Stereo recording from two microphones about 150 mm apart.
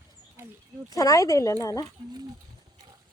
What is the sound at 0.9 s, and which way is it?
Speech, 25° left (ahead or behind).